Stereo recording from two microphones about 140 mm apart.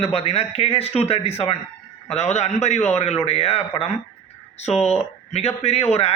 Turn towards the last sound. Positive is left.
turn(degrees=45)  # may be behind; listen again after turning